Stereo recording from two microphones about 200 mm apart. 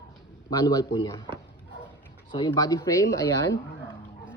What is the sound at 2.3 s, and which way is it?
Speech, 20° left (ahead or behind).